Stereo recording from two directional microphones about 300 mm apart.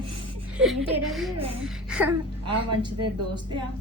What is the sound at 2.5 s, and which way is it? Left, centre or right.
Speech, right.